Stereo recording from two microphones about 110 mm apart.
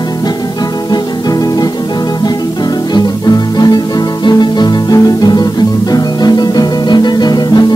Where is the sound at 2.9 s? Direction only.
40° left (ahead or behind).